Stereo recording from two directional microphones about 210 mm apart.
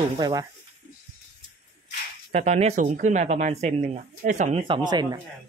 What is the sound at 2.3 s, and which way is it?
Speech, 30° right (ahead or behind).